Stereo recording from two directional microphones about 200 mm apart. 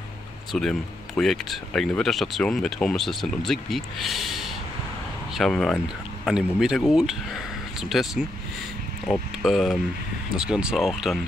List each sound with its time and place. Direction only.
0.5 s speech: 5° left (ahead or behind)